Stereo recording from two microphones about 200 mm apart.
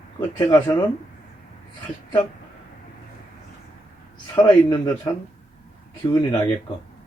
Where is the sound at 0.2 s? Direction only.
15° left (ahead or behind).